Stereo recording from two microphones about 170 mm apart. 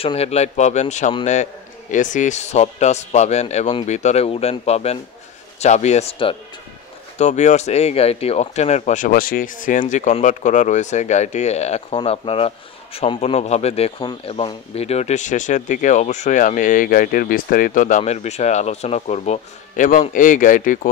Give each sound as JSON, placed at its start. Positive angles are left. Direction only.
{"t": 0.0, "sound": "speech", "side_deg": 35}